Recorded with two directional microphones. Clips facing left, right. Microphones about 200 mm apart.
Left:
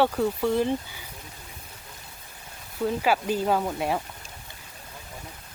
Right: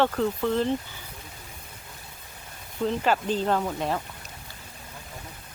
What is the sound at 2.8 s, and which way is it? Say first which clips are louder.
Speech: even; 10° left (ahead or behind).